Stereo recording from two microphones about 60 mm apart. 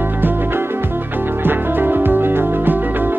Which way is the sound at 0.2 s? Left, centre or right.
Right.